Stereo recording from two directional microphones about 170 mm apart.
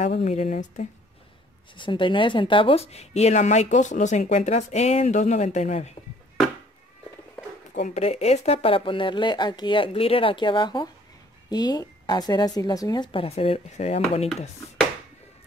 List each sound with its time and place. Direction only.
0.2 s speech: 40° left (ahead or behind)
1.8 s speech: 30° left (ahead or behind)
7.8 s speech: 40° left (ahead or behind)